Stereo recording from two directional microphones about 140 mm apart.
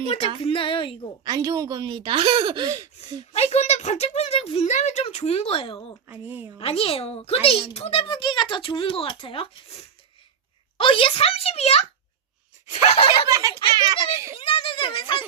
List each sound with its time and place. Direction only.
0.3 s a child's voice: 40° left (ahead or behind)
1.2 s speech: 25° right (ahead or behind)
3.3 s a child's voice: 50° left (ahead or behind)
6.1 s speech: 15° right (ahead or behind)
6.6 s a child's voice: 45° left (ahead or behind)
13.2 s a child's voice: 25° right (ahead or behind)
14.3 s a child's voice: 40° left (ahead or behind)